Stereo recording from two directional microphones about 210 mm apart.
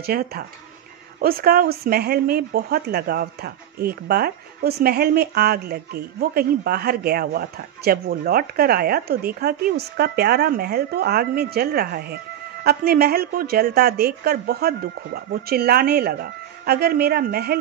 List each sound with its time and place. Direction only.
0.0 s speech: 45° right (ahead or behind)